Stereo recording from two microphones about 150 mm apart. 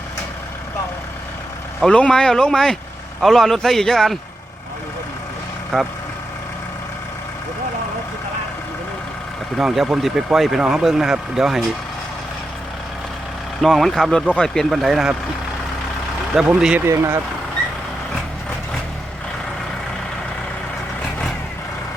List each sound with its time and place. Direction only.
1.8 s speech: 5° left (ahead or behind)
5.7 s speech: 5° left (ahead or behind)
9.6 s speech: centre (ahead or behind)
13.6 s speech: centre (ahead or behind)
16.3 s speech: 5° right (ahead or behind)
16.8 s speech: 15° right (ahead or behind)